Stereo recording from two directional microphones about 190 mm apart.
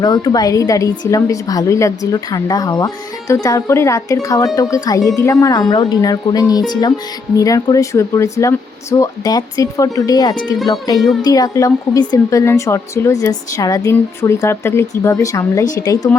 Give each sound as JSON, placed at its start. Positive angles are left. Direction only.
{"t": 0.0, "sound": "wind chime", "side_deg": 20}
{"t": 2.3, "sound": "a woman's voice", "side_deg": 20}
{"t": 4.5, "sound": "wind chime", "side_deg": 20}
{"t": 7.3, "sound": "a woman's voice", "side_deg": 20}
{"t": 10.7, "sound": "wind chime", "side_deg": 20}
{"t": 11.2, "sound": "a woman's voice", "side_deg": 20}